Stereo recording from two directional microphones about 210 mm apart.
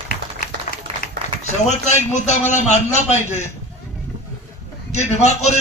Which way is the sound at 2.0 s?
35° left (ahead or behind).